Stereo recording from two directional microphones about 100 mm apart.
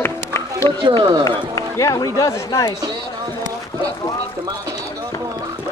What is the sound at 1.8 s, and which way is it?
Speech, 35° left (ahead or behind).